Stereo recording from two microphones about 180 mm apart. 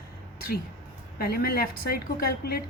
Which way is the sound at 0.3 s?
55° left (ahead or behind).